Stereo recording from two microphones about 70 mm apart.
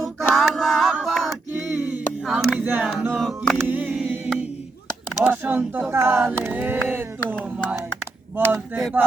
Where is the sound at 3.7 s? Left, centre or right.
Right.